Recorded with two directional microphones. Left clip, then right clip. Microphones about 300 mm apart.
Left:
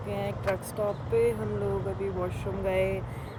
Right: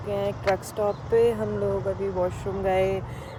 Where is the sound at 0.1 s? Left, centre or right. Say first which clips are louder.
Right 6 dB; centre.